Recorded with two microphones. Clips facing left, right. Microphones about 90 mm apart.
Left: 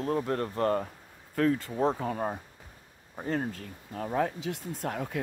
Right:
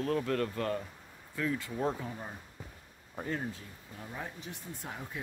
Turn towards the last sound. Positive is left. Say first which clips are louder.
# left 9 dB
turn(degrees=65)  # may be behind; listen again after turning